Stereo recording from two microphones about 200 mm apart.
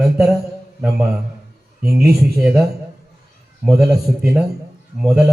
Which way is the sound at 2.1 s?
Centre (ahead or behind).